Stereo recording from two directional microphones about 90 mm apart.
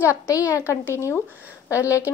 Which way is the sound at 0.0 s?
35° left (ahead or behind).